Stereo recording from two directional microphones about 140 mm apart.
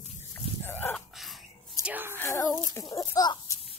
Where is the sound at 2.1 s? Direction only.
15° left (ahead or behind).